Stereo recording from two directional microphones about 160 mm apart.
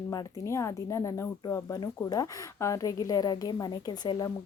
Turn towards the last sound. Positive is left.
turn(degrees=25)  # may be behind; listen again after turning